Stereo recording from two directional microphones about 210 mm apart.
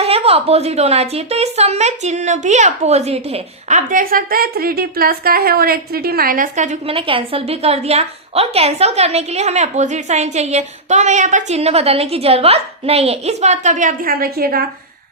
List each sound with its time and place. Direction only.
0.0 s a woman's voice: 30° right (ahead or behind); by 14.6 s 45° right (ahead or behind)